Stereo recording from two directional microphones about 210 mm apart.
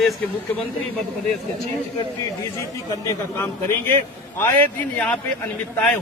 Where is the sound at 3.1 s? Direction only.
10° left (ahead or behind).